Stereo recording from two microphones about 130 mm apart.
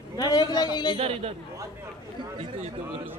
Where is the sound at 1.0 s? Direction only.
50° right (ahead or behind).